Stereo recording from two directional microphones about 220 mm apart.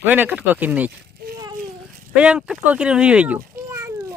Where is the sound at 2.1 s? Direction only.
5° right (ahead or behind).